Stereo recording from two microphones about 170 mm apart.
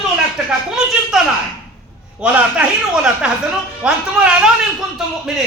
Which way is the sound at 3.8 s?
5° right (ahead or behind).